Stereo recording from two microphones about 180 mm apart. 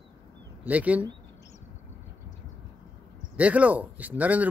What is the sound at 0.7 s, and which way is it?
Speech, 10° right (ahead or behind).